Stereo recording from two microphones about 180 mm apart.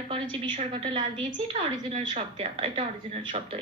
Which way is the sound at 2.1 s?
30° right (ahead or behind).